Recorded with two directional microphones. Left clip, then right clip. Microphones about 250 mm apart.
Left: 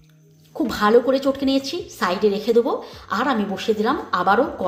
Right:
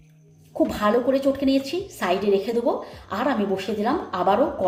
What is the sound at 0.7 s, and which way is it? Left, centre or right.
A woman's voice, centre.